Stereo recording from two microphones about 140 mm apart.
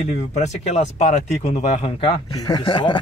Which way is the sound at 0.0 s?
55° left (ahead or behind).